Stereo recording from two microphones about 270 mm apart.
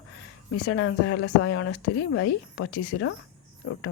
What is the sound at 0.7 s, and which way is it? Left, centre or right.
Speech, left.